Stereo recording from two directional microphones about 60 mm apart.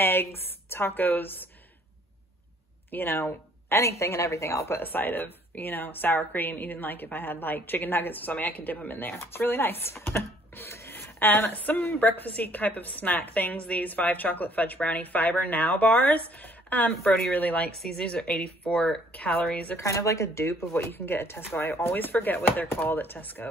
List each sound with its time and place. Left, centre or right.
0.0 s a woman's voice: left
2.9 s speech: left
4.8 s a woman's voice: left
16.9 s speech: centre
17.3 s a woman's voice: left
17.6 s a woman's voice: centre
19.8 s a woman's voice: left